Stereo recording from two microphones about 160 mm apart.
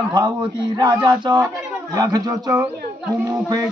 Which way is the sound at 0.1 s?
30° right (ahead or behind).